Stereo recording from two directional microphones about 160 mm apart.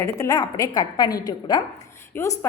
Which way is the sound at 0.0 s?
20° left (ahead or behind).